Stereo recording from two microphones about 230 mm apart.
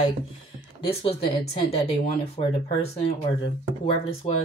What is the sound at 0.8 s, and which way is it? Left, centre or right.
Speech, left.